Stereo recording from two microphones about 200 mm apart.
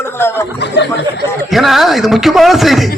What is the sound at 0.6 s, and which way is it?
Speech, 60° left (ahead or behind).